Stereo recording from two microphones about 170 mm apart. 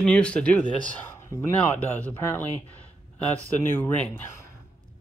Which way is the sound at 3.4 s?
10° left (ahead or behind).